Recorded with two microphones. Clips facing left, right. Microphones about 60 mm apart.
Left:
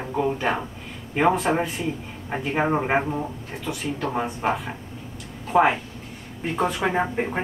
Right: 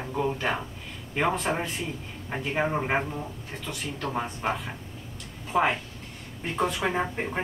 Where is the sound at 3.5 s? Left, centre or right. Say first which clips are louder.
Left 4 dB; centre.